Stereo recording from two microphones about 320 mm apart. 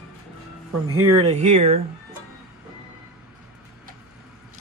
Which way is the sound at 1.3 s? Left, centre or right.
Right.